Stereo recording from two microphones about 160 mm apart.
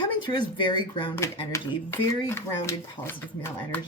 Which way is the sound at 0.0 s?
30° left (ahead or behind).